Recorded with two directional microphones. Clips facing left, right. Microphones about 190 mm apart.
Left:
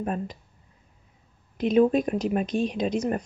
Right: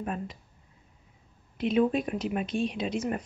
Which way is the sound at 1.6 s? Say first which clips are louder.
Left 5 dB; 40° left (ahead or behind).